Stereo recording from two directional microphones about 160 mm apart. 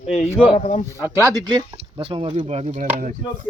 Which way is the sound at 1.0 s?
15° right (ahead or behind).